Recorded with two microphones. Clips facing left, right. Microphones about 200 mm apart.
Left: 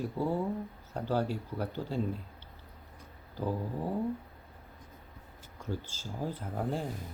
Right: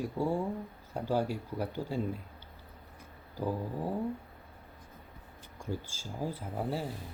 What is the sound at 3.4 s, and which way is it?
Speech, 10° right (ahead or behind).